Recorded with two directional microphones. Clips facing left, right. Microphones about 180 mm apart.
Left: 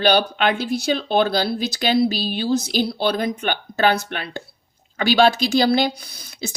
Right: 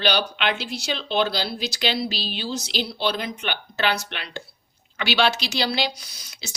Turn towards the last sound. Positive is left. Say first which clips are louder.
# left 5 dB
turn(degrees=55)  # may be behind; listen again after turning